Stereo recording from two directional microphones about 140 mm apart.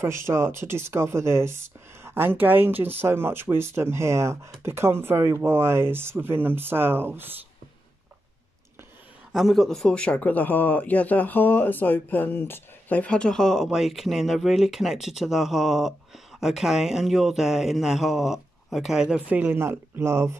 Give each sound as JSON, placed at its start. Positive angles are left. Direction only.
{"t": 0.0, "sound": "speech", "side_deg": -20}
{"t": 9.3, "sound": "a man's voice", "side_deg": 0}